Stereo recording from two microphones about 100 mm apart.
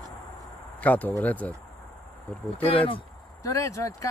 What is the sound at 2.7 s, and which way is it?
Speech, 65° left (ahead or behind).